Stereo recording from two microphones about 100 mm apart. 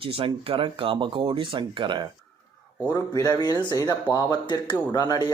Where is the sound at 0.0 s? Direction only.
65° right (ahead or behind).